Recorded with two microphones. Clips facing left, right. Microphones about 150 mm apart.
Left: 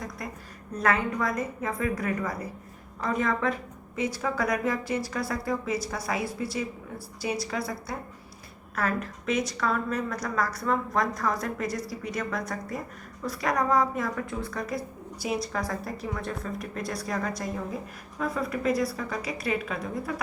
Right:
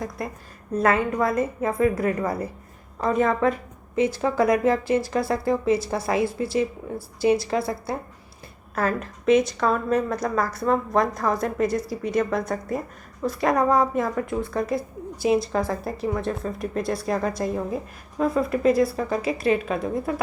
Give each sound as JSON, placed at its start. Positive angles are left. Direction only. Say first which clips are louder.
{"t": 0.8, "sound": "a woman's voice", "louder": "right 5 dB", "side_deg": -25}